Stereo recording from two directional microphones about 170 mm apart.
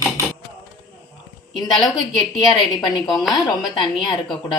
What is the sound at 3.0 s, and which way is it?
Speech, centre (ahead or behind).